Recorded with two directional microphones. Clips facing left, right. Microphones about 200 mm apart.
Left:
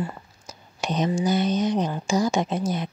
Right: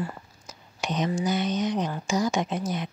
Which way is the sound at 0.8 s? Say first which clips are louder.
Left 3 dB; 30° left (ahead or behind).